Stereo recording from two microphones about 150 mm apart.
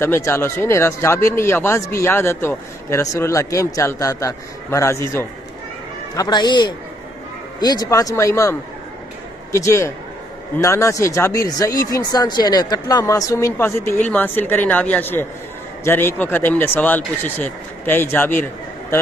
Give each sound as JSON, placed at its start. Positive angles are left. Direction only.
{"t": 0.0, "sound": "speech", "side_deg": 15}